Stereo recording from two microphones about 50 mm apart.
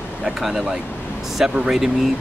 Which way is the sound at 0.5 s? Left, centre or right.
Centre.